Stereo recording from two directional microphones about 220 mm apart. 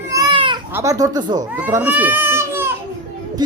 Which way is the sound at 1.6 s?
10° right (ahead or behind).